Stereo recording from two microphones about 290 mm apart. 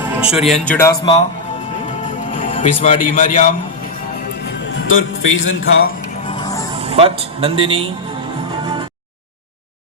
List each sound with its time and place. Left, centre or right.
0.0 s speech: centre
1.9 s music: left
4.4 s a man's voice: left
6.2 s music: centre
6.7 s speech: centre
8.6 s music: centre